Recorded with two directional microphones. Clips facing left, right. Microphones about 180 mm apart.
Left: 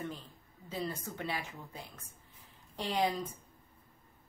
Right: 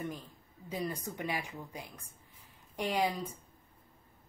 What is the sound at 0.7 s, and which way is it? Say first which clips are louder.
A woman's voice: right 1 dB; 15° right (ahead or behind).